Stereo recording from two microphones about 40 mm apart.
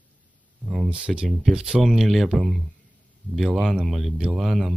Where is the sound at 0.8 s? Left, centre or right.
Right.